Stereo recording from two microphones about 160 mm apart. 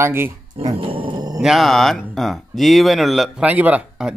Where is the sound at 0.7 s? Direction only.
35° right (ahead or behind).